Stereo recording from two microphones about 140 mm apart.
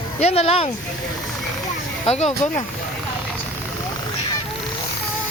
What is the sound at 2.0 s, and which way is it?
Speech, 50° left (ahead or behind).